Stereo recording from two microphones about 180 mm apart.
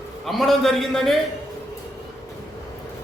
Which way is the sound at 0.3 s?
Centre (ahead or behind).